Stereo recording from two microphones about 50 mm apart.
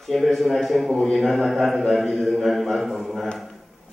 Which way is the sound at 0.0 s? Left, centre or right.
Centre.